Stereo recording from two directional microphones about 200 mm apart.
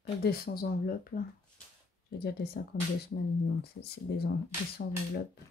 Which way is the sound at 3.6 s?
55° left (ahead or behind).